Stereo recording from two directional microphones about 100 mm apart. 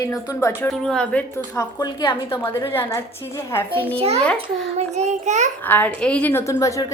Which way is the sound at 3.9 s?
90° right.